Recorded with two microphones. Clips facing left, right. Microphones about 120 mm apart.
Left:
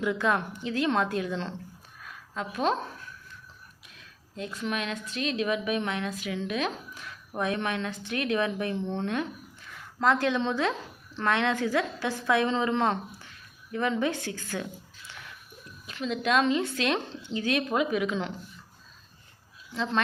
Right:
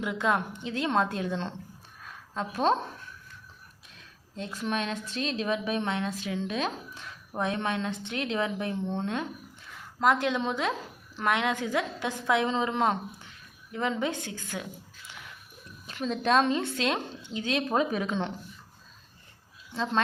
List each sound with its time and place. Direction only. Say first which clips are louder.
0.0 s a woman's voice: left 1 dB; 20° right (ahead or behind)
4.4 s speech: right 1 dB; 30° right (ahead or behind)
16.0 s speech: right 1 dB; 35° right (ahead or behind)